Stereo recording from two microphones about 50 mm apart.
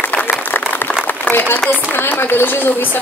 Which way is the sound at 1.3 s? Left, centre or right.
Left.